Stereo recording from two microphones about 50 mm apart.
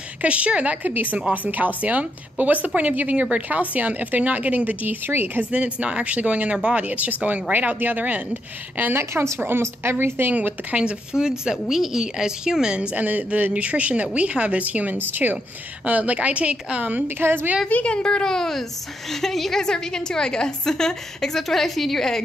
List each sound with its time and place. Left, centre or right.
0.2 s speech: right
0.9 s a woman's voice: right
5.0 s a woman's voice: right
5.4 s speech: right
8.9 s a woman's voice: right
10.7 s a woman's voice: right
12.9 s a woman's voice: right
15.0 s a woman's voice: right
15.8 s speech: right
17.2 s a woman's voice: right
17.6 s a woman's voice: left; by 22.2 s centre